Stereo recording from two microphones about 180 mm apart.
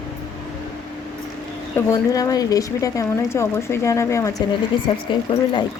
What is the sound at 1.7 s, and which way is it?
A woman's voice, 15° left (ahead or behind).